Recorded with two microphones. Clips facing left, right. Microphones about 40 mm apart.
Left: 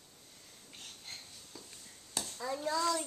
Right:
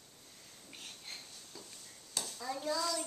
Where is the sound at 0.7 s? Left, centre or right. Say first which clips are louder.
Even; centre.